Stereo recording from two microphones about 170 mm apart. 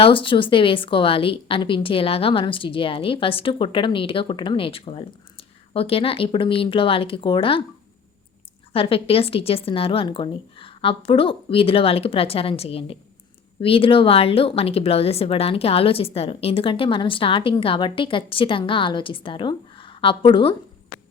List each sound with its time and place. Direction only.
0.0 s speech: 30° left (ahead or behind)
8.7 s speech: 35° left (ahead or behind)